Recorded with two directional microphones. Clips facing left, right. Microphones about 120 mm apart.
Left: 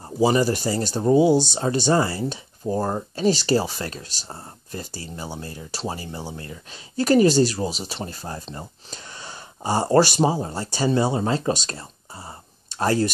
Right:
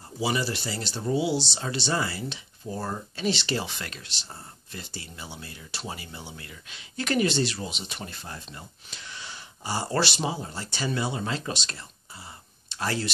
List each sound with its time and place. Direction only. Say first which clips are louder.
0.2 s speech: left 9 dB; 45° left (ahead or behind)